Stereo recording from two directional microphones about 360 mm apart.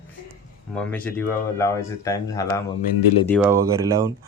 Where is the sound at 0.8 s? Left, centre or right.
Centre.